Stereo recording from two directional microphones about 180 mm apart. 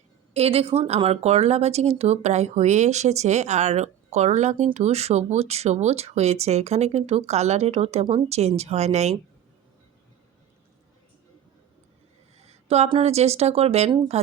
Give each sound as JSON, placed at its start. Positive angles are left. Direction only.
{"t": 0.3, "sound": "speech", "side_deg": -35}
{"t": 12.4, "sound": "speech", "side_deg": -35}